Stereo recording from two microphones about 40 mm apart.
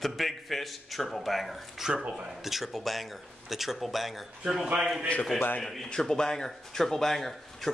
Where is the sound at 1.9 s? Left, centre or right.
Centre.